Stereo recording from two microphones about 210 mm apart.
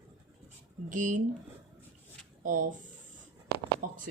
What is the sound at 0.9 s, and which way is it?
Speech, 40° right (ahead or behind).